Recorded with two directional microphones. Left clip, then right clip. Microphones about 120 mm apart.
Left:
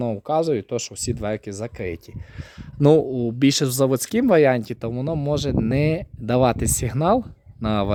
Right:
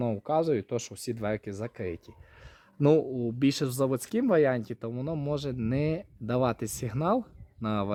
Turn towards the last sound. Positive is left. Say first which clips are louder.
# left 8 dB
turn(degrees=30)  # may be behind; listen again after turning